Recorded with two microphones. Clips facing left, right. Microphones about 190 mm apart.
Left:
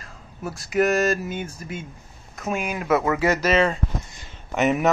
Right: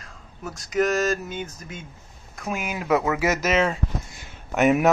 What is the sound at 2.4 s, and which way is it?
Speech, 5° right (ahead or behind).